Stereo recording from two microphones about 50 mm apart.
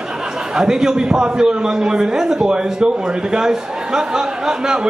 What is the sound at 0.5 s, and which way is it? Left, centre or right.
A man's voice, centre.